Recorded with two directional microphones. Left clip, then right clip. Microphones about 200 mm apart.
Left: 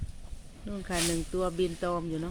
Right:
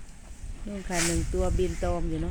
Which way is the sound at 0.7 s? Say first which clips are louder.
Right 2 dB; 5° left (ahead or behind).